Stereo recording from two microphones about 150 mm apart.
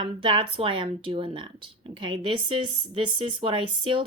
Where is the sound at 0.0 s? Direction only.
35° right (ahead or behind).